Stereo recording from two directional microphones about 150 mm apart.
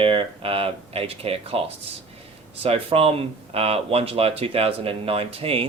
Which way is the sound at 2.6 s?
40° right (ahead or behind).